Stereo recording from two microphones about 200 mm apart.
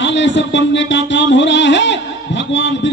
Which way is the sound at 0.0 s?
65° left (ahead or behind).